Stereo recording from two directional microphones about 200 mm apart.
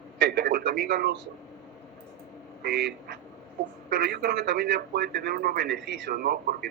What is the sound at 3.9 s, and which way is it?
A man's voice, 55° right (ahead or behind).